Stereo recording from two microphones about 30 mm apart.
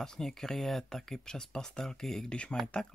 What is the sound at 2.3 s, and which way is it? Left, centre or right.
Speech, left.